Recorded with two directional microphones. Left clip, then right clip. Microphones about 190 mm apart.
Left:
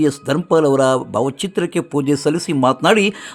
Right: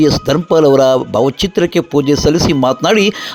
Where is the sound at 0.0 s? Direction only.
20° right (ahead or behind).